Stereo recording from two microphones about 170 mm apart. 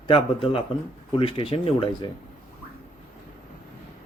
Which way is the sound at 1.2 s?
35° left (ahead or behind).